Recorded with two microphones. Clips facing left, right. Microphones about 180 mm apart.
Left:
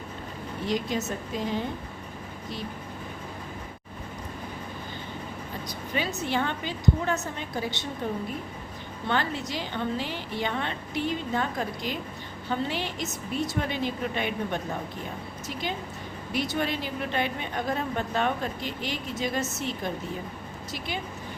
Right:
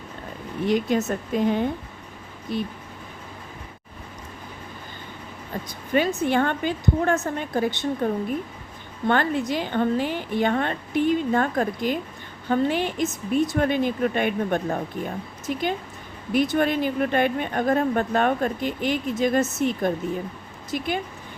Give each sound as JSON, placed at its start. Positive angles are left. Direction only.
{"t": 0.7, "sound": "a woman's voice", "side_deg": -55}
{"t": 2.5, "sound": "a woman's voice", "side_deg": -55}
{"t": 5.6, "sound": "speech", "side_deg": -50}
{"t": 16.3, "sound": "speech", "side_deg": -50}